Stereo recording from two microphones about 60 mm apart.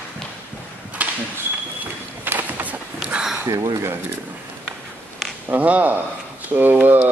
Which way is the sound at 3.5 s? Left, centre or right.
Right.